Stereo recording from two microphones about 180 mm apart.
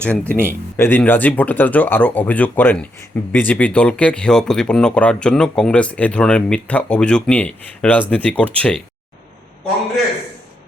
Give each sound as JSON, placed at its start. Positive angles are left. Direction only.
{"t": 0.0, "sound": "speech", "side_deg": 10}